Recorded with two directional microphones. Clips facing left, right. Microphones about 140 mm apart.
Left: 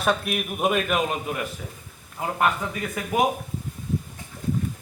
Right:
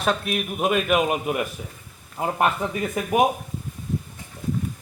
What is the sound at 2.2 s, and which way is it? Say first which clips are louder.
Speech: right 2 dB; 25° right (ahead or behind).